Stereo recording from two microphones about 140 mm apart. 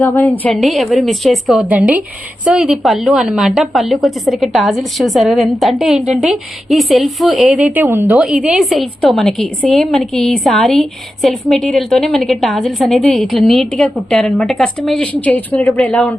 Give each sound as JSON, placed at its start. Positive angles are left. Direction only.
{"t": 0.0, "sound": "a woman's voice", "side_deg": 20}
{"t": 0.4, "sound": "a woman's voice", "side_deg": 0}
{"t": 8.1, "sound": "a woman's voice", "side_deg": -5}